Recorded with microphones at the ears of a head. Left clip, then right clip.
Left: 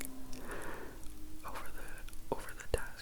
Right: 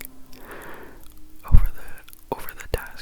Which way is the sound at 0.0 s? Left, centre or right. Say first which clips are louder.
Right 4 dB; right.